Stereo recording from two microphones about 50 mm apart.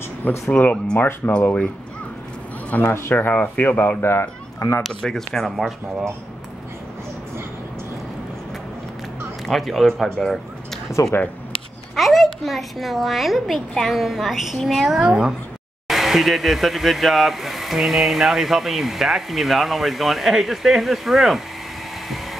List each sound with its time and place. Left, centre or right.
0.5 s speech: left
0.9 s speech: left
1.3 s speech: left
2.9 s speech: left
3.2 s speech: left
4.0 s speech: left
5.0 s speech: centre
9.5 s speech: centre
10.0 s speech: centre
10.9 s speech: left
11.9 s speech: centre
15.0 s speech: centre
15.9 s speech: centre